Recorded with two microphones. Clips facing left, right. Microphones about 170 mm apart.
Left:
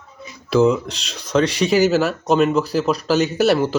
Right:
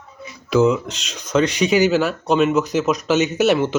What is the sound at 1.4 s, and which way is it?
Speech, 35° left (ahead or behind).